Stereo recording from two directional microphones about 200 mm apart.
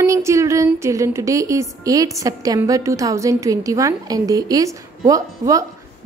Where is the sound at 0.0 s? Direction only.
15° right (ahead or behind).